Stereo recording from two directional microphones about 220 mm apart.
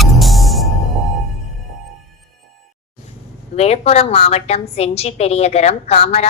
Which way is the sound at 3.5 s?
30° left (ahead or behind).